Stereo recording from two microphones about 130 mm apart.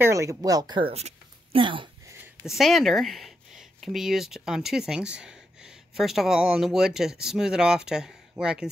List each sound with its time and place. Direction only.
0.0 s speech: 25° right (ahead or behind)
0.9 s a sound: 55° right (ahead or behind)
1.6 s speech: 40° right (ahead or behind)
2.4 s speech: centre (ahead or behind)